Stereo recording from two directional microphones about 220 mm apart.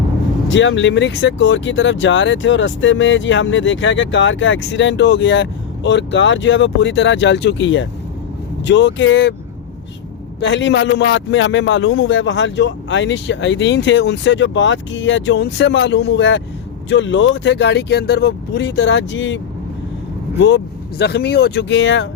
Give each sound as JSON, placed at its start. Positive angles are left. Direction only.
{"t": 0.4, "sound": "speech", "side_deg": 55}
{"t": 10.4, "sound": "speech", "side_deg": 55}
{"t": 21.0, "sound": "speech", "side_deg": 50}